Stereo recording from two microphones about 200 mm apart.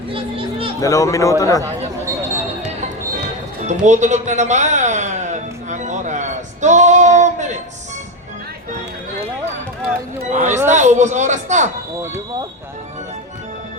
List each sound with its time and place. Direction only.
0.1 s chatter: 25° right (ahead or behind)
0.8 s a man's voice: 15° left (ahead or behind)
3.7 s music: 35° right (ahead or behind)
10.2 s speech: 35° right (ahead or behind)